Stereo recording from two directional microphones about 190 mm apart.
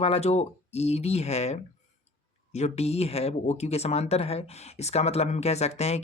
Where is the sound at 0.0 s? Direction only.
30° left (ahead or behind).